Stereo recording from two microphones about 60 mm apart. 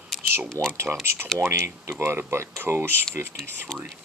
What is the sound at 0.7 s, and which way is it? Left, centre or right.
Speech, right.